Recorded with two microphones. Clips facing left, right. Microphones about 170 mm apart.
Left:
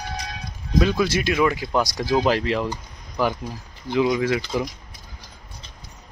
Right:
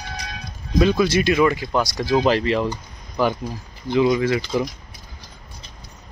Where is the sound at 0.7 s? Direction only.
5° left (ahead or behind).